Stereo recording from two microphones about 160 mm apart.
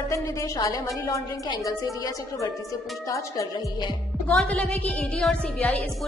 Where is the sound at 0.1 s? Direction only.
20° left (ahead or behind).